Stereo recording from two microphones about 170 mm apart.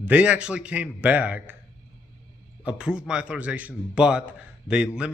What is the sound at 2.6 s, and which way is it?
A man's voice, 5° right (ahead or behind).